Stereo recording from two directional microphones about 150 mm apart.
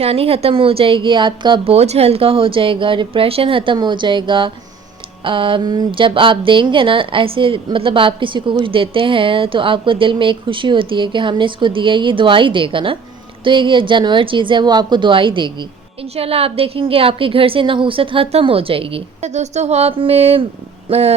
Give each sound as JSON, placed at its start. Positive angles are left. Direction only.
{"t": 0.0, "sound": "a woman's voice", "side_deg": -40}